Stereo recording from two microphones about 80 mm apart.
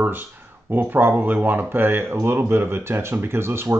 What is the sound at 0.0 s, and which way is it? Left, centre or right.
Speech, right.